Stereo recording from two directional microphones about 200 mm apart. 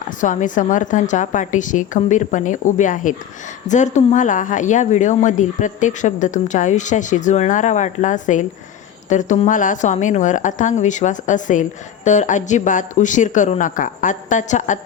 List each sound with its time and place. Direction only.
0.2 s speech: 40° left (ahead or behind)